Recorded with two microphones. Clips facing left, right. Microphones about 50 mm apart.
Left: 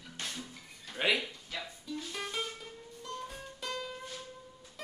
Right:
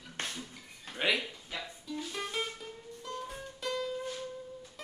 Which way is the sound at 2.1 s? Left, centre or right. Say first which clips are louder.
Right 2 dB; centre.